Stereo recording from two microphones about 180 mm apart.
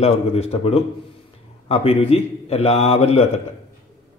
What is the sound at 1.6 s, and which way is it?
A man's voice, 35° left (ahead or behind).